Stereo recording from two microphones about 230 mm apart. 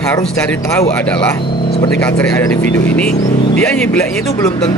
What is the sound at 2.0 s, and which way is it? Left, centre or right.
Speech, centre.